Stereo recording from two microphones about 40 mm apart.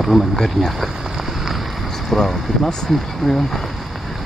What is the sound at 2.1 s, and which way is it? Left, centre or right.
Speech, centre.